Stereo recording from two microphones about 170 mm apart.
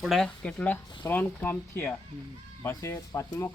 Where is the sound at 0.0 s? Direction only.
Centre (ahead or behind).